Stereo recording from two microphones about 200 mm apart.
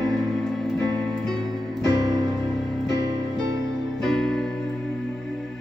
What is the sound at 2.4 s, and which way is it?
Music, centre (ahead or behind).